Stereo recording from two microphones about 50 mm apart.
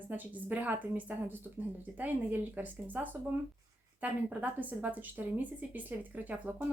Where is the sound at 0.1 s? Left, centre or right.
Right.